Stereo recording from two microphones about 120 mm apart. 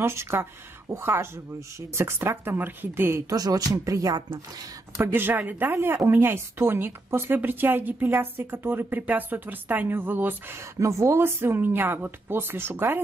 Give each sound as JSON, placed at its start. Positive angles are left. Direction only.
{"t": 0.0, "sound": "speech", "side_deg": -20}
{"t": 3.3, "sound": "speech", "side_deg": -30}
{"t": 4.9, "sound": "speech", "side_deg": -15}